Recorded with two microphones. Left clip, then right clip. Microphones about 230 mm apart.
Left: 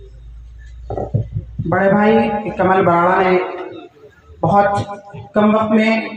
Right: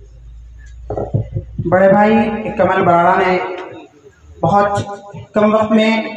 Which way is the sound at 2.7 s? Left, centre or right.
Right.